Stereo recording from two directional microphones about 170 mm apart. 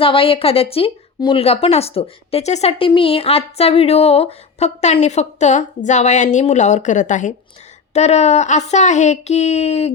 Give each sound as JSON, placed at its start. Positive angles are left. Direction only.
{"t": 0.0, "sound": "speech", "side_deg": 30}